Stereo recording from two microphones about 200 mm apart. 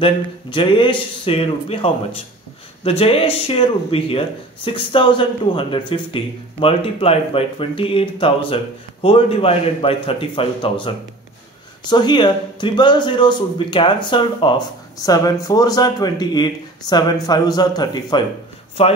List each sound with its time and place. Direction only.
0.0 s speech: 25° left (ahead or behind)